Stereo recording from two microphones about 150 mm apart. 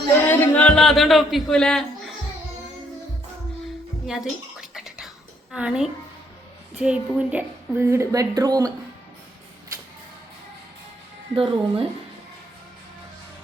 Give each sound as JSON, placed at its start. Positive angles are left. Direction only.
{"t": 0.3, "sound": "music", "side_deg": 10}
{"t": 4.0, "sound": "speech", "side_deg": 0}
{"t": 4.7, "sound": "whispering", "side_deg": -5}
{"t": 6.7, "sound": "a woman's voice", "side_deg": -5}
{"t": 11.3, "sound": "speech", "side_deg": -35}